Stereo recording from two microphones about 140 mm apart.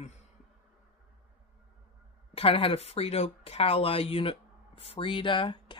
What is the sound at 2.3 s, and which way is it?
Speech, 45° left (ahead or behind).